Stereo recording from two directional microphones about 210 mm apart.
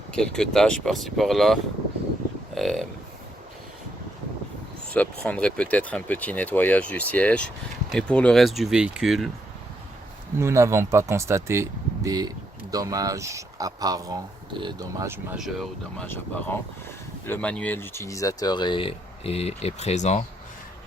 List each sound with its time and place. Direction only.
0.1 s speech: 5° left (ahead or behind)
2.6 s speech: centre (ahead or behind)
4.9 s speech: 5° left (ahead or behind)
10.3 s speech: 15° right (ahead or behind)
15.4 s speech: centre (ahead or behind)
16.0 s speech: 10° left (ahead or behind); by 20.2 s 35° left (ahead or behind)